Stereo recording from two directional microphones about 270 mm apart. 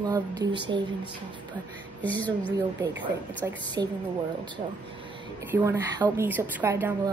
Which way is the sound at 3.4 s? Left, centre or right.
Centre.